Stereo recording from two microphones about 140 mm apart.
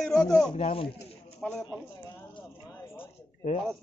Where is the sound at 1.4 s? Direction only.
5° left (ahead or behind).